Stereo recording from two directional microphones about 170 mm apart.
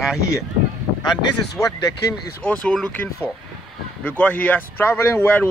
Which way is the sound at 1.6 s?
20° left (ahead or behind).